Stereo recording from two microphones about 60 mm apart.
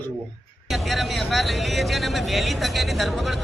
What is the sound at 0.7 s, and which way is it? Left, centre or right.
Speech, centre.